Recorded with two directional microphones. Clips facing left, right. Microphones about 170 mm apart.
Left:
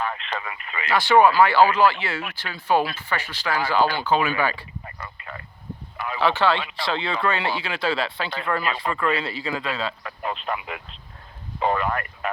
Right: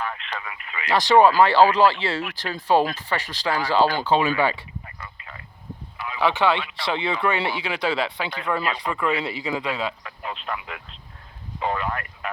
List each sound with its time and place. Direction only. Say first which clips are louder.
0.0 s speech: left 2 dB; 30° left (ahead or behind)
0.9 s speech: right 1 dB; 35° right (ahead or behind)
4.9 s a sound: left 4 dB; 55° left (ahead or behind)
6.1 s speech: even; 15° right (ahead or behind)
10.0 s a sound: left 4 dB; 50° left (ahead or behind)
11.6 s vehicle: left 3 dB; 50° left (ahead or behind)